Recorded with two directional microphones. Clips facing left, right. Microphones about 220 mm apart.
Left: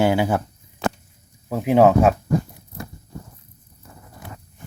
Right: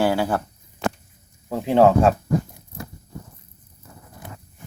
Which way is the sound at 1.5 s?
10° left (ahead or behind).